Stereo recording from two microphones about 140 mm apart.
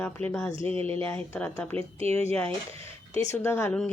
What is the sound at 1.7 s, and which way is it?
Speech, 45° right (ahead or behind).